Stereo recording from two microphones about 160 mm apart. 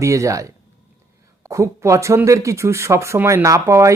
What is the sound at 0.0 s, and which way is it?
A man's voice, 20° right (ahead or behind).